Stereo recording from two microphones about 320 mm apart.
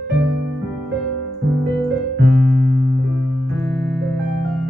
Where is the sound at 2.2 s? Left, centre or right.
Right.